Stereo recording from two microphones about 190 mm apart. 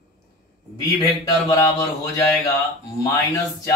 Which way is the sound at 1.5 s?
15° left (ahead or behind).